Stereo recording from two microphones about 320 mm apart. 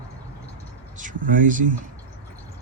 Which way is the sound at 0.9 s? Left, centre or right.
Right.